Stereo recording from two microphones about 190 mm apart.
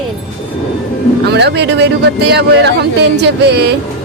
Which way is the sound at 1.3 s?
60° right (ahead or behind).